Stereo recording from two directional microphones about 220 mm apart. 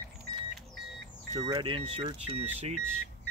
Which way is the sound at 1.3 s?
20° right (ahead or behind).